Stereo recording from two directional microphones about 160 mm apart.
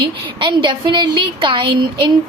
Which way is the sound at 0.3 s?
30° right (ahead or behind).